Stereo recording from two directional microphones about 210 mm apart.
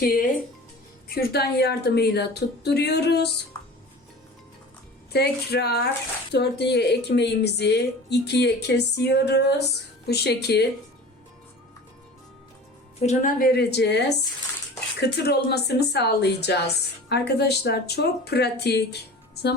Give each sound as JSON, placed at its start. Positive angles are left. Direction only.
{"t": 0.0, "sound": "speech", "side_deg": 45}
{"t": 5.1, "sound": "speech", "side_deg": 50}
{"t": 13.0, "sound": "speech", "side_deg": 35}
{"t": 15.0, "sound": "speech", "side_deg": 50}